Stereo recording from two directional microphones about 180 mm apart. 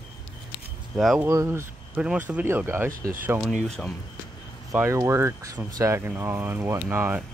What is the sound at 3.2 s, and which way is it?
Speech, 10° right (ahead or behind).